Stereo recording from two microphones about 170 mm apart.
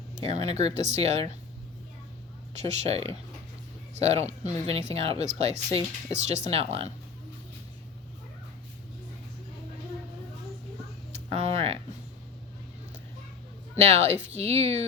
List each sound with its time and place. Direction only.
0.3 s speech: 40° right (ahead or behind)
2.6 s speech: 40° right (ahead or behind)
11.3 s a sound: 35° right (ahead or behind)
13.7 s speech: 35° right (ahead or behind)